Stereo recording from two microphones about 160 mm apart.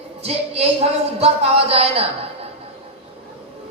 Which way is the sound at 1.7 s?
40° right (ahead or behind).